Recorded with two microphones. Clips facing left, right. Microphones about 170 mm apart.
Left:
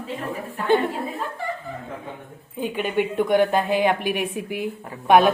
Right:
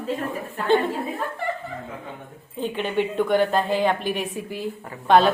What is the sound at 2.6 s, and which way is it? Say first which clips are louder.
Speech: left 1 dB; 10° left (ahead or behind).